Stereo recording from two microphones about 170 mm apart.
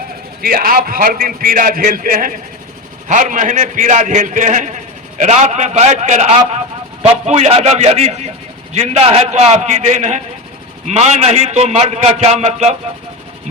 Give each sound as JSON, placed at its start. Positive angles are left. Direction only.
{"t": 0.4, "sound": "a man's voice", "side_deg": -60}